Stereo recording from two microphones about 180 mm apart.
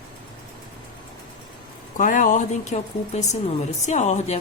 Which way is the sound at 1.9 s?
45° left (ahead or behind).